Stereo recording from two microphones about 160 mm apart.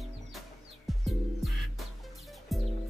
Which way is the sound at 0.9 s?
Centre (ahead or behind).